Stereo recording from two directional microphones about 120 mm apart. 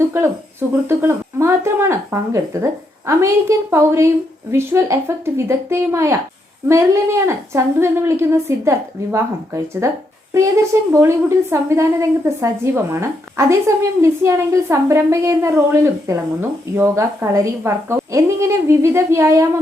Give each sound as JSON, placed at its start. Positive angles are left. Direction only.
{"t": 0.9, "sound": "a woman's voice", "side_deg": -20}